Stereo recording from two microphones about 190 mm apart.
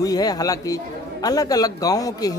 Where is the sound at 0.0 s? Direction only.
20° left (ahead or behind).